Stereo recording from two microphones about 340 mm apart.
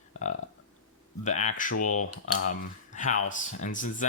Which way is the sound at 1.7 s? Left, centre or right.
Left.